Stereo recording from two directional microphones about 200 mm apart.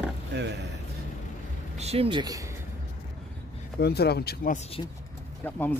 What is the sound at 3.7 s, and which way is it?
Speech, 55° left (ahead or behind).